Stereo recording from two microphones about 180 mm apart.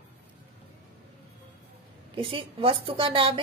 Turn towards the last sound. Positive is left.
turn(degrees=-30)  # may be behind; listen again after turning